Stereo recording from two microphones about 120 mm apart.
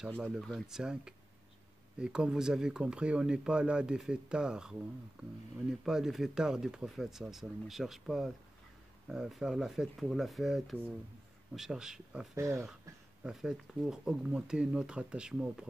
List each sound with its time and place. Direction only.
0.2 s speech: 5° right (ahead or behind)
12.4 s speech: 25° right (ahead or behind)
13.2 s speech: 5° right (ahead or behind)